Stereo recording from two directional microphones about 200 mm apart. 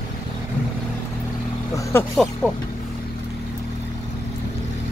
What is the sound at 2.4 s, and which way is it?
Speech, centre (ahead or behind).